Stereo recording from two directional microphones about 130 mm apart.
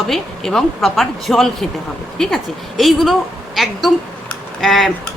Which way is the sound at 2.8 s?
Centre (ahead or behind).